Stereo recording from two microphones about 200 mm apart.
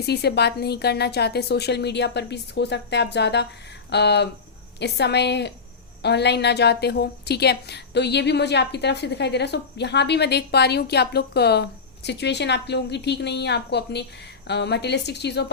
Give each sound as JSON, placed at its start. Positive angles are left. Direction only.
{"t": 0.0, "sound": "a woman's voice", "side_deg": 55}